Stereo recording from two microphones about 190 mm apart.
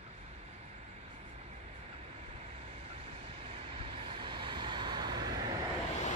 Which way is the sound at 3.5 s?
30° right (ahead or behind).